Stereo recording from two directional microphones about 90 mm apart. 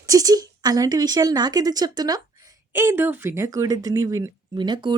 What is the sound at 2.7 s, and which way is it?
Speech, 25° right (ahead or behind).